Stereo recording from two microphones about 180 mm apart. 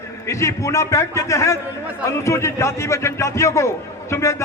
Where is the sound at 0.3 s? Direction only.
15° left (ahead or behind).